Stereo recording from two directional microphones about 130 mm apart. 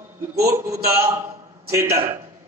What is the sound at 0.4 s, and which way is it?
A man's voice, 20° right (ahead or behind).